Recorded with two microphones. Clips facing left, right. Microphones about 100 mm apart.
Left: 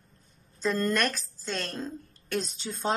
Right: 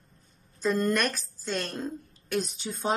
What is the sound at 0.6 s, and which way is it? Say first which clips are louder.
A woman's voice: right 1 dB; centre (ahead or behind).